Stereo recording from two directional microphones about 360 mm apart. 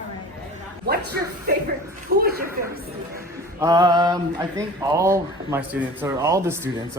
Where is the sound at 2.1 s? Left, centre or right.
Right.